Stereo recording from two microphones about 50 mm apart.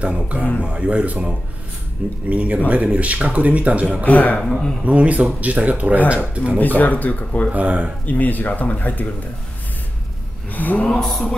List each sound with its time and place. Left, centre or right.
0.0 s speech: right
2.2 s speech: right
4.0 s speech: left
4.4 s speech: centre
4.8 s speech: right
6.6 s speech: left
7.5 s speech: right
8.0 s speech: left
10.5 s vehicle: left
11.0 s mantra: centre